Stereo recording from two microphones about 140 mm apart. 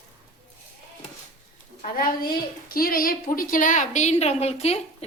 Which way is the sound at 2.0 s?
90° left.